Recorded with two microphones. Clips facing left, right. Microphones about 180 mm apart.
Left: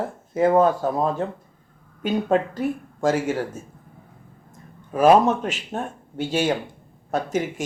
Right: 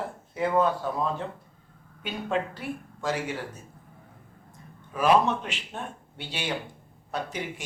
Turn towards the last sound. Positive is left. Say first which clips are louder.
# left 9 dB
turn(degrees=45)  # may be behind; listen again after turning